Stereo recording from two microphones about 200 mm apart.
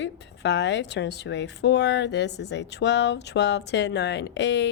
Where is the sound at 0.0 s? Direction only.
60° left (ahead or behind).